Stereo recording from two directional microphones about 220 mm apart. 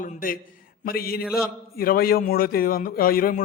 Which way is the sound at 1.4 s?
45° left (ahead or behind).